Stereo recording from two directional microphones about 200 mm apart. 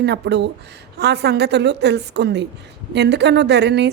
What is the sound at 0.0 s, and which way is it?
A woman's voice, 60° right (ahead or behind).